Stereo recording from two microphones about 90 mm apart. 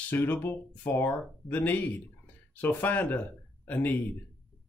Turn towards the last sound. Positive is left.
turn(degrees=20)  # may be behind; listen again after turning